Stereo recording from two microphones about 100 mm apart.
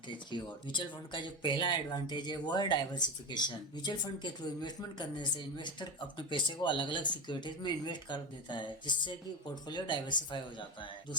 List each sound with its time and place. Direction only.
0.1 s speech: 50° left (ahead or behind)